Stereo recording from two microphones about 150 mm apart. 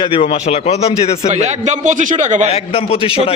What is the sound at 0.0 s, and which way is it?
Speech, 40° left (ahead or behind).